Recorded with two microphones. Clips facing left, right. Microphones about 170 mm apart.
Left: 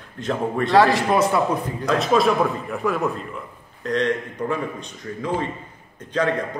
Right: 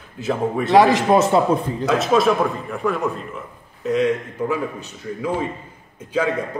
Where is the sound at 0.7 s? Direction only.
20° right (ahead or behind).